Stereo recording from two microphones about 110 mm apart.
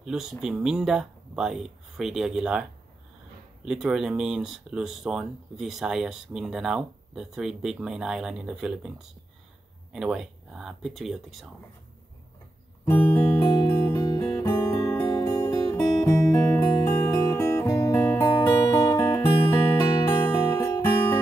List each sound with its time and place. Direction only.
0.0 s speech: 5° right (ahead or behind)
3.6 s speech: 5° right (ahead or behind)
13.1 s music: 15° left (ahead or behind)
14.1 s music: 30° left (ahead or behind)